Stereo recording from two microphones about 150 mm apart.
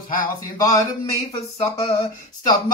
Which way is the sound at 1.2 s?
45° left (ahead or behind).